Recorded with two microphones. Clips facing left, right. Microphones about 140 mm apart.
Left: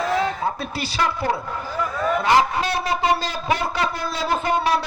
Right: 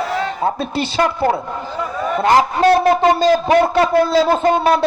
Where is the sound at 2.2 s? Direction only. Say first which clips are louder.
Right 8 dB; 50° right (ahead or behind).